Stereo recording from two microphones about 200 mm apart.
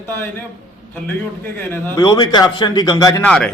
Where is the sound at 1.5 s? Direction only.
10° left (ahead or behind).